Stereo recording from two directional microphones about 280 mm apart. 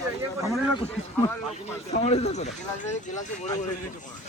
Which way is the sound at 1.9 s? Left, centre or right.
Left.